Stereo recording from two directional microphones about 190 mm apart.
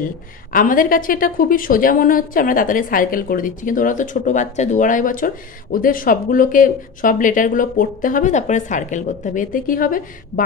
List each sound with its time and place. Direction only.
0.5 s a woman's voice: 45° left (ahead or behind)